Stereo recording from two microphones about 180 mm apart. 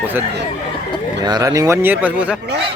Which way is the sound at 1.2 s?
20° right (ahead or behind).